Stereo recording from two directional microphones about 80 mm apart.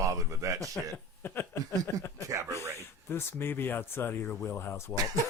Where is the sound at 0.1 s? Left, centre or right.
Right.